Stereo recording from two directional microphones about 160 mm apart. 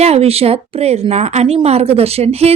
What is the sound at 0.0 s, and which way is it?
Speech, 40° right (ahead or behind).